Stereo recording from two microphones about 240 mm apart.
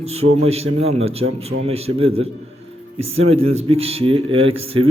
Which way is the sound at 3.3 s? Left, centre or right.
Right.